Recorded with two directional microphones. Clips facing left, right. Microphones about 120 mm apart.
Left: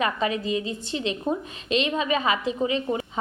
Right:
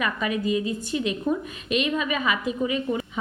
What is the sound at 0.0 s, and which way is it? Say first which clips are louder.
A woman's voice: left 1 dB; 30° left (ahead or behind).